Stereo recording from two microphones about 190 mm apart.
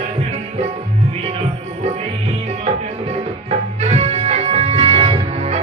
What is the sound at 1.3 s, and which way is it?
Music, 35° right (ahead or behind).